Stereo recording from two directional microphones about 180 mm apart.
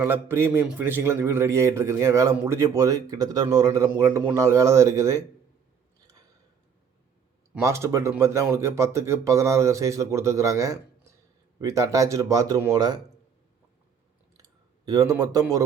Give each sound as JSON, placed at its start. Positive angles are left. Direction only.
{"t": 0.0, "sound": "a man's voice", "side_deg": -15}
{"t": 7.6, "sound": "a man's voice", "side_deg": -15}
{"t": 14.8, "sound": "speech", "side_deg": -20}